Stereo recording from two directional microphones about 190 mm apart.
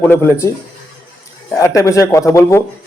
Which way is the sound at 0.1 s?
15° left (ahead or behind).